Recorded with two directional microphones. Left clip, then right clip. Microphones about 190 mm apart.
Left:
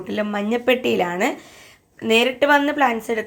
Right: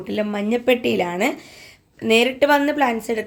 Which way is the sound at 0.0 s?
5° right (ahead or behind).